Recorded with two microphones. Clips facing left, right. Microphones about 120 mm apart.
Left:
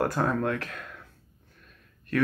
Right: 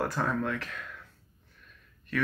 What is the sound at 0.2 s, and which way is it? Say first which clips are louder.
Speech: left 3 dB; 30° left (ahead or behind).